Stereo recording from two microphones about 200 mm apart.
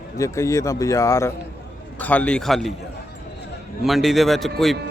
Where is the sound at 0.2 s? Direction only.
15° left (ahead or behind).